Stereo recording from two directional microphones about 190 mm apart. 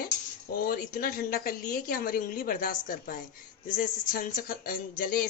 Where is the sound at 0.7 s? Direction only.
50° left (ahead or behind).